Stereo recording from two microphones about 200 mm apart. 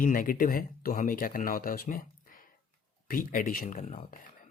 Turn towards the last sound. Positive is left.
turn(degrees=40)  # may be behind; listen again after turning